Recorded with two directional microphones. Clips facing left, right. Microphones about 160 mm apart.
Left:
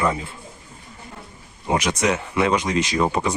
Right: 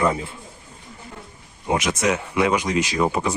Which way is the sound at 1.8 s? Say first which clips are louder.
Left 1 dB; 10° right (ahead or behind).